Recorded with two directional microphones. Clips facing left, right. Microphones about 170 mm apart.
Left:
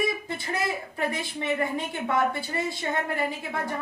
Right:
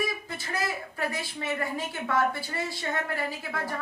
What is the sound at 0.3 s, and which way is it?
Speech, 25° left (ahead or behind).